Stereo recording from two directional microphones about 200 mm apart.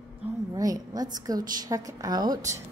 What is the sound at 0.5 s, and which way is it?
A woman's voice, 15° right (ahead or behind).